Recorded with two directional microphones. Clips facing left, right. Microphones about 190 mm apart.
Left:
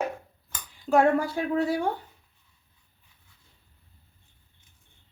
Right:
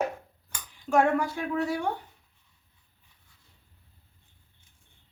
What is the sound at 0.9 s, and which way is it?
Speech, 35° left (ahead or behind).